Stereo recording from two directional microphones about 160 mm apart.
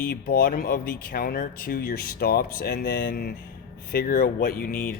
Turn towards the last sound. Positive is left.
turn(degrees=60)  # may be behind; listen again after turning